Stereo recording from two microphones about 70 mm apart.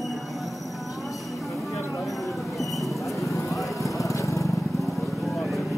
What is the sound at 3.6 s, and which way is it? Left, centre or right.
Vehicle, left.